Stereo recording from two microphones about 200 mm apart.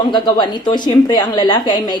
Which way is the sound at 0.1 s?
20° left (ahead or behind).